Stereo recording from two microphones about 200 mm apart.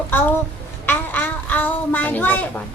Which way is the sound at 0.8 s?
10° left (ahead or behind).